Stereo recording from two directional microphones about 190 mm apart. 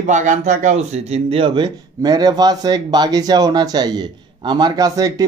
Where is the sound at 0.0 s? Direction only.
40° right (ahead or behind).